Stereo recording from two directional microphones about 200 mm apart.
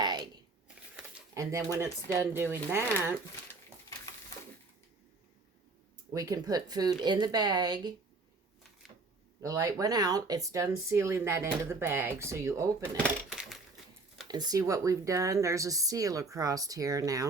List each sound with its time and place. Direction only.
1.3 s speech: 15° right (ahead or behind)
6.1 s a woman's voice: 20° right (ahead or behind)
9.4 s speech: 15° right (ahead or behind)
13.0 s dishes: centre (ahead or behind)
14.3 s speech: 20° right (ahead or behind)